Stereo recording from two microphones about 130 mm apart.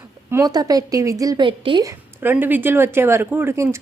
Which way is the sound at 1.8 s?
25° right (ahead or behind).